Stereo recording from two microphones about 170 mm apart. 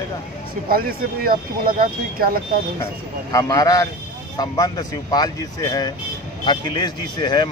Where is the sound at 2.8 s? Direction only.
20° left (ahead or behind).